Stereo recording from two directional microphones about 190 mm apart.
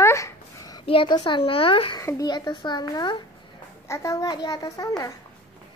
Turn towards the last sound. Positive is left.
turn(degrees=20)  # may be behind; listen again after turning